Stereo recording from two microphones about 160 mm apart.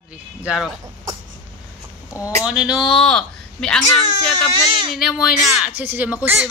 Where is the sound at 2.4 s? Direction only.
5° right (ahead or behind).